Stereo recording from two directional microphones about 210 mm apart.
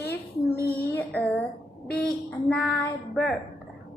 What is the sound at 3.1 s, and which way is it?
Speech, 5° left (ahead or behind).